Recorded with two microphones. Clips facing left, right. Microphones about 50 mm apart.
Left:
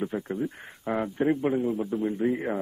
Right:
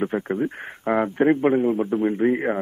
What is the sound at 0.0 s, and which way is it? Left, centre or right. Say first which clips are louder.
A man's voice: right 6 dB; right.